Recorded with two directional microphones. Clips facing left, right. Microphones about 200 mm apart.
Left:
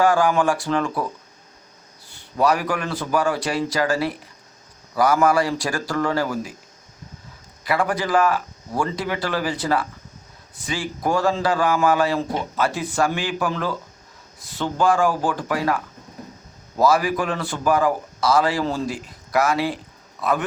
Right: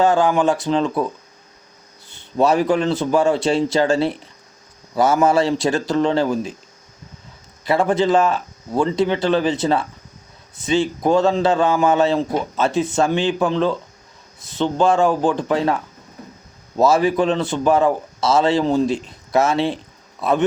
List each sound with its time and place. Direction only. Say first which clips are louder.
0.0 s a man's voice: right 2 dB; 20° right (ahead or behind)
2.0 s a man's voice: right 3 dB; 25° right (ahead or behind)
7.6 s a man's voice: right 5 dB; 25° right (ahead or behind)